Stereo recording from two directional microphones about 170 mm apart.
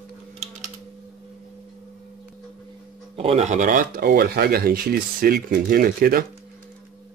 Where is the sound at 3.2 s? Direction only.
40° right (ahead or behind); by 6.2 s 55° right (ahead or behind).